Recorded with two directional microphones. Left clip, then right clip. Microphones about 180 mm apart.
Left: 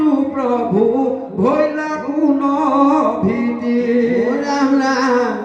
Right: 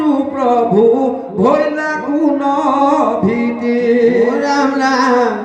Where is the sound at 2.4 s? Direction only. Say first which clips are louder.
Right 2 dB; 50° right (ahead or behind).